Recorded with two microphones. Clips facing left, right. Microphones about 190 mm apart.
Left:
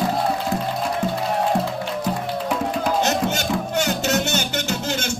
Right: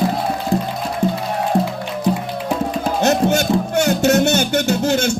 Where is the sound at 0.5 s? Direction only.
30° right (ahead or behind).